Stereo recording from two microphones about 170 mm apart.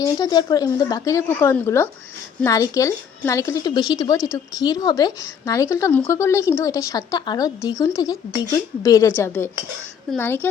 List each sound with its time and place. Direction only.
0.0 s a woman's voice: 20° left (ahead or behind)